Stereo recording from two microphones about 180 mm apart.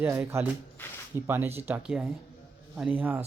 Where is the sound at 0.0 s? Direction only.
15° right (ahead or behind).